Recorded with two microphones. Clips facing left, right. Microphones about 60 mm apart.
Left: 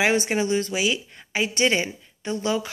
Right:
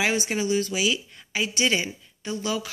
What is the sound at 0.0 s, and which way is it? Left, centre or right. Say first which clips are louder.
Speech: left 3 dB; left.